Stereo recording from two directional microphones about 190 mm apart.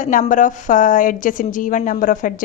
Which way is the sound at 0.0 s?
45° left (ahead or behind).